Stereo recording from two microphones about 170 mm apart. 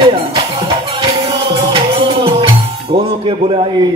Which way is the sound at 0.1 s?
35° right (ahead or behind).